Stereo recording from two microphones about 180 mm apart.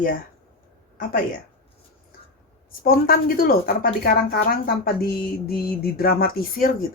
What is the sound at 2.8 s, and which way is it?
A woman's voice, 55° left (ahead or behind).